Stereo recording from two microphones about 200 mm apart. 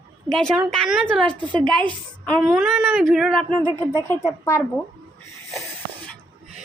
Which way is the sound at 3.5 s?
25° right (ahead or behind).